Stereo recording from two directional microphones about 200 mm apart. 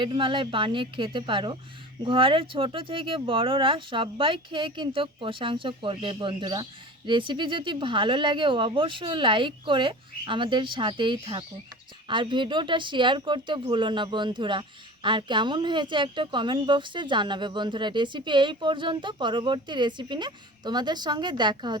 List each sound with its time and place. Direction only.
0.0 s speech: 25° right (ahead or behind)